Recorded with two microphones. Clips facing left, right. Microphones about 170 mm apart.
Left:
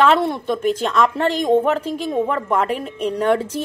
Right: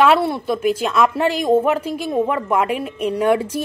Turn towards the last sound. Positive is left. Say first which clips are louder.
# right 1 dB
turn(degrees=-10)  # may be behind; listen again after turning